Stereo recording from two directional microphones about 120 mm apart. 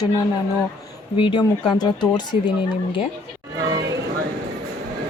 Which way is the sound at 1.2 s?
40° left (ahead or behind).